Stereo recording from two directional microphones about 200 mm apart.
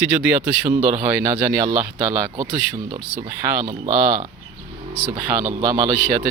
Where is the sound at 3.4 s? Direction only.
10° right (ahead or behind).